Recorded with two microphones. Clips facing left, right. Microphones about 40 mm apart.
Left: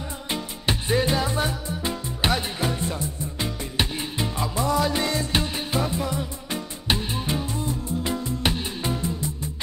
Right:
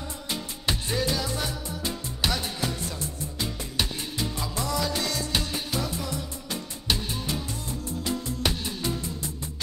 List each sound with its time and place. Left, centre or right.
0.3 s music: left